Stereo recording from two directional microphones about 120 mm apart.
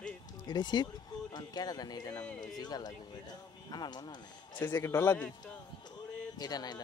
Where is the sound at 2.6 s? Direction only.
35° left (ahead or behind).